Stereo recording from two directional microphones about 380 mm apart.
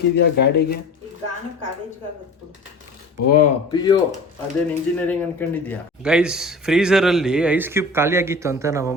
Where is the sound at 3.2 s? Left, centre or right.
Left.